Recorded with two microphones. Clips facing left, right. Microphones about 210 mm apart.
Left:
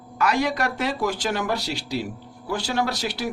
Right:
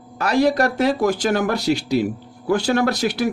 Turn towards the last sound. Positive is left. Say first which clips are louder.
# right 7 dB
turn(degrees=-50)  # may be behind; listen again after turning